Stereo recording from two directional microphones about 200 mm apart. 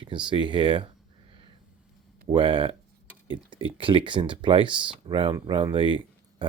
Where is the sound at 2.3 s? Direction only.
25° right (ahead or behind).